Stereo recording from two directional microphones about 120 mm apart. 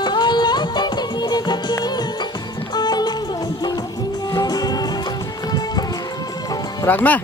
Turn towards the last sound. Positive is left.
turn(degrees=15)  # may be behind; listen again after turning